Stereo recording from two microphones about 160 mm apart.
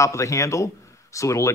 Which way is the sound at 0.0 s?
20° left (ahead or behind).